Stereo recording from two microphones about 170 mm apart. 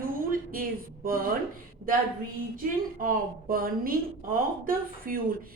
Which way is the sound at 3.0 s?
55° right (ahead or behind).